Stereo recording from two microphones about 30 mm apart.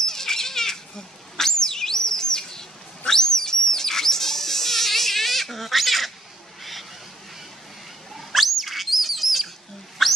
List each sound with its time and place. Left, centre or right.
0.0 s bird: centre
3.1 s goat: centre
6.6 s vehicle: centre
8.1 s bird: centre
10.0 s a sound: centre